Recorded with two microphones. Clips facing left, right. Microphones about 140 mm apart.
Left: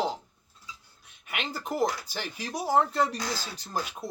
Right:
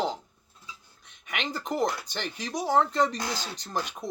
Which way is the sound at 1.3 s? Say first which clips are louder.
Right 1 dB; 5° left (ahead or behind).